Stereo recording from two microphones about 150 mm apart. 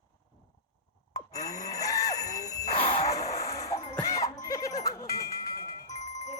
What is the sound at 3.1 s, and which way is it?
Music, 20° left (ahead or behind).